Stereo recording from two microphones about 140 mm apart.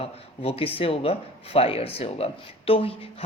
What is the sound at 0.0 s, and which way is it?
Speech, 45° left (ahead or behind).